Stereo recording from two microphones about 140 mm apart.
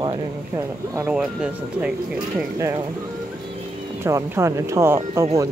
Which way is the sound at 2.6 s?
20° right (ahead or behind).